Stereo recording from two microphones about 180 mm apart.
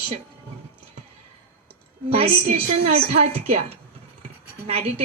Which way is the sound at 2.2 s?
30° right (ahead or behind).